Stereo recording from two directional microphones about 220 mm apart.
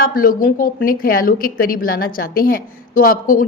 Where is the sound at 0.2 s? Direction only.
40° left (ahead or behind).